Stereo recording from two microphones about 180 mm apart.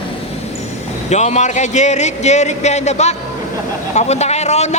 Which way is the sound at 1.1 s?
40° left (ahead or behind).